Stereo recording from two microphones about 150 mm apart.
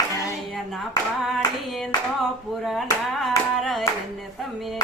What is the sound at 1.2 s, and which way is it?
Hands, centre (ahead or behind).